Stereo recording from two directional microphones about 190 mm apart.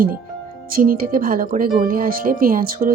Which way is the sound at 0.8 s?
50° right (ahead or behind).